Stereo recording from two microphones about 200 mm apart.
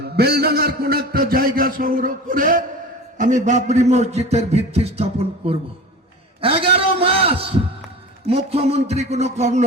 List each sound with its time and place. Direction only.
0.0 s a man's voice: 55° right (ahead or behind); by 5.5 s 30° right (ahead or behind)
6.4 s a sound: 30° right (ahead or behind)
8.3 s a man's voice: 30° right (ahead or behind)